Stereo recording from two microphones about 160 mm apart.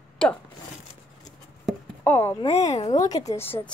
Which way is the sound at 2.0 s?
15° left (ahead or behind).